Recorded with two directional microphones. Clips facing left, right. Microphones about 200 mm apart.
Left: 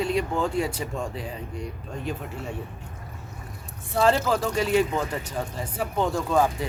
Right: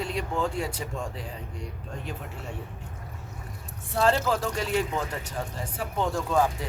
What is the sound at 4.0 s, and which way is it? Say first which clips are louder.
Speech: left 3 dB; 5° left (ahead or behind).